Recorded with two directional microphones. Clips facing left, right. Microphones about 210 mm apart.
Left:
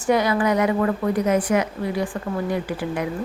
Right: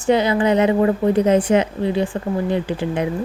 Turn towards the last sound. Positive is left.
turn(degrees=-25)  # may be behind; listen again after turning